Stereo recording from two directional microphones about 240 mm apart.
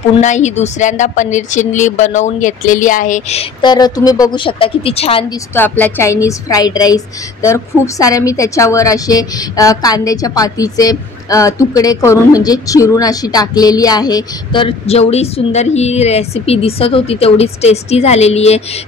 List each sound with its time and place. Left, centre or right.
0.2 s speech: left
5.5 s a woman's voice: centre; by 18.6 s left